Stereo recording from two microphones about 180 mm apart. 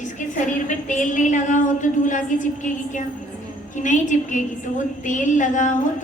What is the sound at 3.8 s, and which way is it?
Female singing, 45° left (ahead or behind).